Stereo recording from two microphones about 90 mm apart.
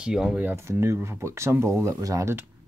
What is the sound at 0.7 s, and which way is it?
Speech, 30° right (ahead or behind).